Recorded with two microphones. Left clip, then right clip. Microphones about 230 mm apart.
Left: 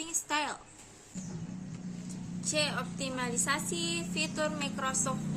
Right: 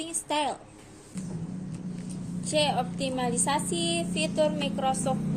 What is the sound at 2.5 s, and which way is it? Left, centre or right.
A woman's voice, centre.